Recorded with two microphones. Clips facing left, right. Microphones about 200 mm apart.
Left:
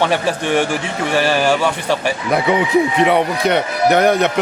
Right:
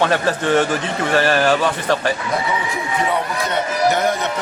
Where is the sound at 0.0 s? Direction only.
15° left (ahead or behind).